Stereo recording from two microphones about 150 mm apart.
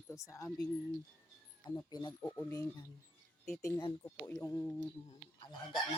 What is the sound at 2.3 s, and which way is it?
Speech, 20° left (ahead or behind).